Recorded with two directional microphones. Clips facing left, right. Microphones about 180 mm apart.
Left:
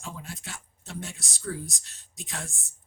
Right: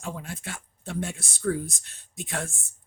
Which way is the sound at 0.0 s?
55° right (ahead or behind).